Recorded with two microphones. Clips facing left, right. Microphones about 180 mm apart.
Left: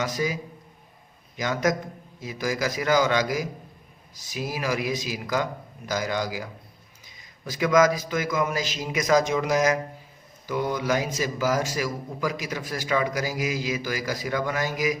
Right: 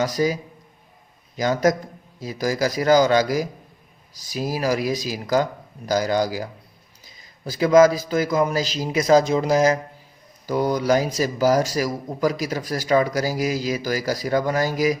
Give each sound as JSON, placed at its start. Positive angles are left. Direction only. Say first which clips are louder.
{"t": 0.0, "sound": "a man's voice", "louder": "right 6 dB", "side_deg": -35}
{"t": 1.4, "sound": "a man's voice", "louder": "right 5 dB", "side_deg": -35}